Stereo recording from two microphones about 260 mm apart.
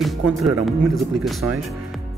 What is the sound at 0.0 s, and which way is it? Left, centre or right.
Speech, centre.